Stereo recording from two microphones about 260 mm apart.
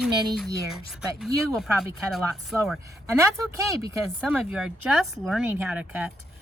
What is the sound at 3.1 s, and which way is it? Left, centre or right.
Speech, centre.